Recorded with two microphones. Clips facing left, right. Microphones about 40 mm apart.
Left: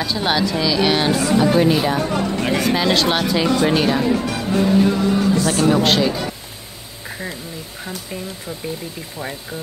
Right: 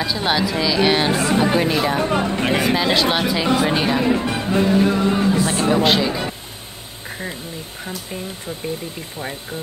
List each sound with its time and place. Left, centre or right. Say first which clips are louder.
0.0 s speech: even; centre
1.1 s speech: left 1 dB; right
1.4 s speech: left 4 dB; centre
1.7 s speech: left 2 dB; centre
2.0 s speech: right 1 dB; right
2.7 s speech: even; centre
4.0 s speech: even; right
5.1 s music: left 1 dB; right
5.7 s speech: even; centre
7.1 s duck: even; centre
7.8 s speech: even; centre